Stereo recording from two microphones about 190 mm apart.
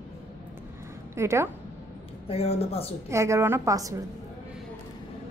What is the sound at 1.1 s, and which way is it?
Speech, 15° right (ahead or behind).